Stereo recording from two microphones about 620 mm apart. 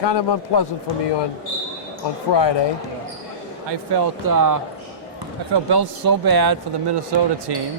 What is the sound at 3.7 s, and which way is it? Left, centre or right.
Speech, right.